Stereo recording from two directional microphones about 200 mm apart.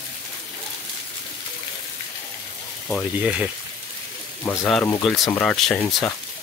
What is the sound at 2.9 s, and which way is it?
Speech, 5° right (ahead or behind).